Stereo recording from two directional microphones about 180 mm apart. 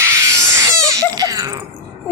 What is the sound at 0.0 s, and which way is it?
Baby cry, 15° right (ahead or behind).